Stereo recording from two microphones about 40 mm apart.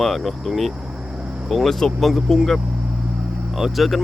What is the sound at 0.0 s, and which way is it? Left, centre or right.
Speech, centre.